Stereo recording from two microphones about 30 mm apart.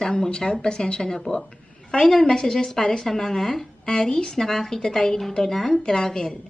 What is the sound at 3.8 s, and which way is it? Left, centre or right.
Speech, left.